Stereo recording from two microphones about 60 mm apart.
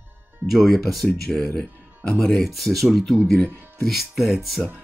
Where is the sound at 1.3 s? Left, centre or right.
Centre.